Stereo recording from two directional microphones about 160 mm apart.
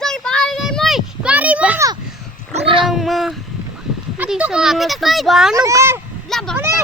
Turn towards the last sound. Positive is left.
turn(degrees=5)  # may be behind; listen again after turning